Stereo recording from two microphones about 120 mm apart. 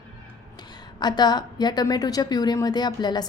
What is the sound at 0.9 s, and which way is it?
A woman's voice, 35° left (ahead or behind).